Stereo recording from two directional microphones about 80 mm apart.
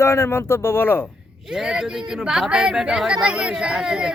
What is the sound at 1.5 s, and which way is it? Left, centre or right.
Speech, centre.